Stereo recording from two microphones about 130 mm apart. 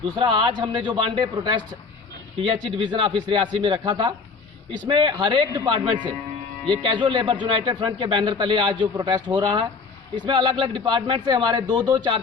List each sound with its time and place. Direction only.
0.2 s a man's voice: 40° right (ahead or behind)